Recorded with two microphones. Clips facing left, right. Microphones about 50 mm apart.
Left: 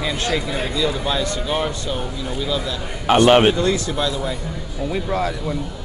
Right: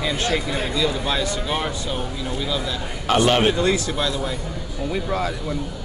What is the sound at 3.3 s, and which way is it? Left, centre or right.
Speech, left.